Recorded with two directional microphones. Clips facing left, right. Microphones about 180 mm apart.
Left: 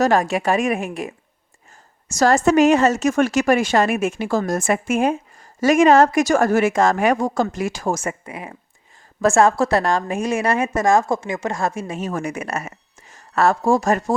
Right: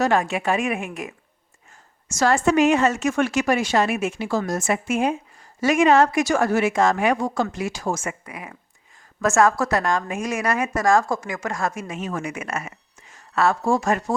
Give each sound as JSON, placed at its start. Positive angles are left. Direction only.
{"t": 0.0, "sound": "a woman's voice", "side_deg": 45}
{"t": 8.2, "sound": "a woman's voice", "side_deg": 25}